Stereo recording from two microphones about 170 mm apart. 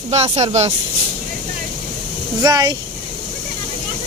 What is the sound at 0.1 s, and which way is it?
Speech, 40° right (ahead or behind).